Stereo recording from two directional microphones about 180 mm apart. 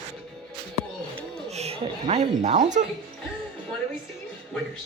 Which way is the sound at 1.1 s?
35° right (ahead or behind).